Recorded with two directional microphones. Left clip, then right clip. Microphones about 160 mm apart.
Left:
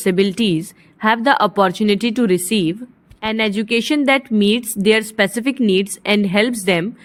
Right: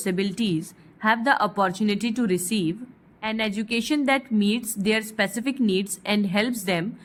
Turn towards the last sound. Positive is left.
turn(degrees=35)  # may be behind; listen again after turning